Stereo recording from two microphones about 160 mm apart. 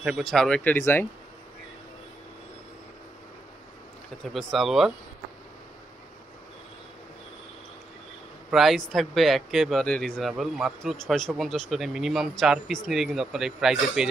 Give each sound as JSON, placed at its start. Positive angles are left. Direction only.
{"t": 0.0, "sound": "speech", "side_deg": 0}
{"t": 0.7, "sound": "speech", "side_deg": 15}
{"t": 4.3, "sound": "speech", "side_deg": 0}
{"t": 8.5, "sound": "speech", "side_deg": 0}